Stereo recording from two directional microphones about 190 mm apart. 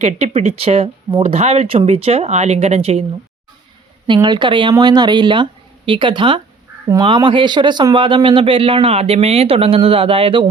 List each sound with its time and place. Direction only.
0.0 s speech: 35° right (ahead or behind)
4.0 s speech: 25° right (ahead or behind)